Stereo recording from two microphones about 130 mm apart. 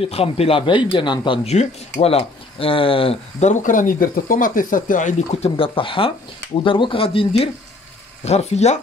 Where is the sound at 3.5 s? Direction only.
85° left; by 7.5 s 45° left (ahead or behind).